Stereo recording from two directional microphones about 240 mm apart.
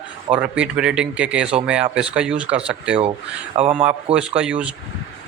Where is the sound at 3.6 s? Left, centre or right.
Right.